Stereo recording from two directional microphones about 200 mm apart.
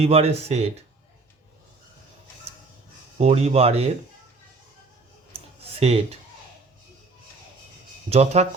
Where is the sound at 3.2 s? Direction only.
30° right (ahead or behind).